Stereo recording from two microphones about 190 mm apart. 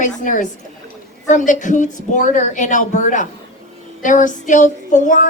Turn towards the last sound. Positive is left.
turn(degrees=40)  # may be behind; listen again after turning